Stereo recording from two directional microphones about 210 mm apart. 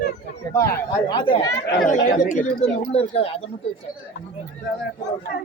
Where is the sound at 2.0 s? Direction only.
40° left (ahead or behind).